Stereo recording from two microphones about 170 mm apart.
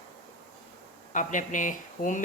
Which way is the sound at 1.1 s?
50° left (ahead or behind).